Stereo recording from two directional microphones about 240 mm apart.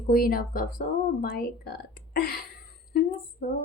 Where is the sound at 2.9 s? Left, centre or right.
Left.